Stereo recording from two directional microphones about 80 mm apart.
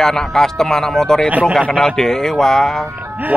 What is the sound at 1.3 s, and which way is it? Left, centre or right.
Speech, centre.